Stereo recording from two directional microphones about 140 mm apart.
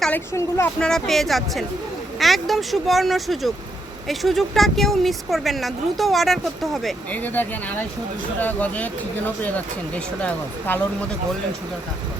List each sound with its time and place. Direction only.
0.3 s speech: 20° left (ahead or behind)
0.8 s speech: 5° left (ahead or behind)
7.1 s speech: 15° left (ahead or behind)